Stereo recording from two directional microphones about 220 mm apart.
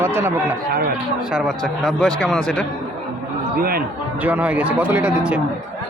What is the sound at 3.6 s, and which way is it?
Speech, 45° right (ahead or behind).